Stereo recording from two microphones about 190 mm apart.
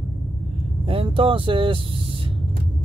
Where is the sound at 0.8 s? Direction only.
30° right (ahead or behind).